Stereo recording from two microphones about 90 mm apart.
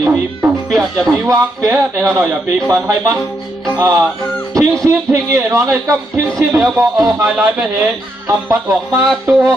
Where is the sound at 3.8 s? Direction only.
20° right (ahead or behind).